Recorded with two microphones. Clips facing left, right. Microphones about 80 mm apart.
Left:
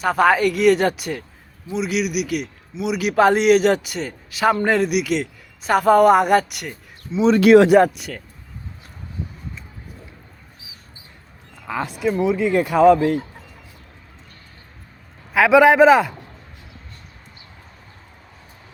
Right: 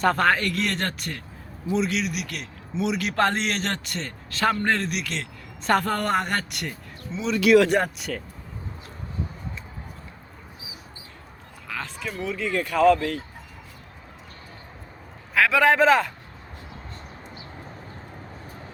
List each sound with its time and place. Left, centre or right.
0.0 s a man's voice: centre
7.3 s speech: left
7.7 s speech: centre
11.7 s speech: centre
15.3 s speech: centre